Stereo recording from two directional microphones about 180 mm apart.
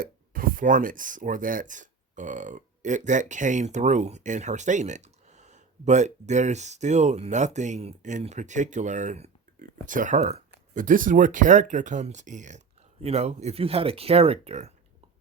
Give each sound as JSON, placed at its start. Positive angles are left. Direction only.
{"t": 0.0, "sound": "speech", "side_deg": -50}